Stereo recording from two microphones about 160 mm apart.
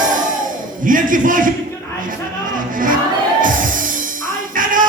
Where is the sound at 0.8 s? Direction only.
55° right (ahead or behind).